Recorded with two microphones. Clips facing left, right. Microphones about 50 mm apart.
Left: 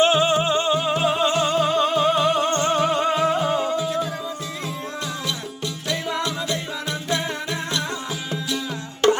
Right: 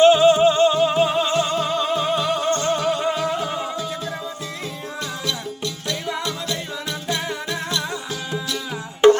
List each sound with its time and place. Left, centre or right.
0.0 s music: left
0.7 s music: centre
1.2 s music: centre
2.4 s music: left
3.8 s music: centre
5.2 s music: centre
7.1 s music: left
9.0 s music: right